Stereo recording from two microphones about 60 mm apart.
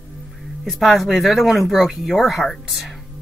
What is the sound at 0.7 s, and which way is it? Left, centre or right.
Speech, centre.